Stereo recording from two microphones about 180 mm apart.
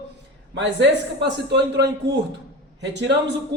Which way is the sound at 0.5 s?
75° right (ahead or behind).